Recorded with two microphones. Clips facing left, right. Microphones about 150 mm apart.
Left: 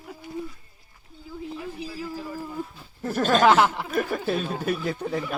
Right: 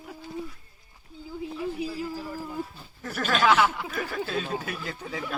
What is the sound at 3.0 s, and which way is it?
Speech, 35° left (ahead or behind).